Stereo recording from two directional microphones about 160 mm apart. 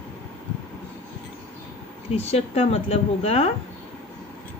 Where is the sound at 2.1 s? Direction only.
40° left (ahead or behind).